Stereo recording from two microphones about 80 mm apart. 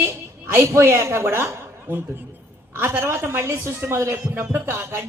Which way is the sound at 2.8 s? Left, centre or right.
Right.